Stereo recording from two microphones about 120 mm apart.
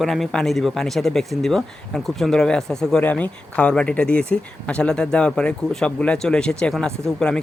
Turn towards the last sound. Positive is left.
turn(degrees=5)  # may be behind; listen again after turning